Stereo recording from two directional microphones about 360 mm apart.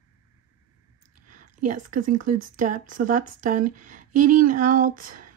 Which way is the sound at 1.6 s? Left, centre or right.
Right.